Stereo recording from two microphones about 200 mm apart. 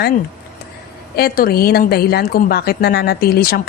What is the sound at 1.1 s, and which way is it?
A woman's voice, 50° left (ahead or behind).